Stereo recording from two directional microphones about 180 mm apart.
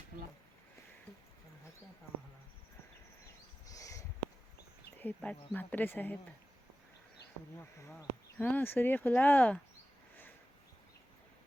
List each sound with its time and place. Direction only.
3.7 s a sound: 20° left (ahead or behind)
4.9 s speech: 10° left (ahead or behind)
7.9 s speech: 10° left (ahead or behind)